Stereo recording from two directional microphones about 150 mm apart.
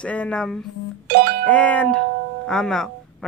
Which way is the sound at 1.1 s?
90° right.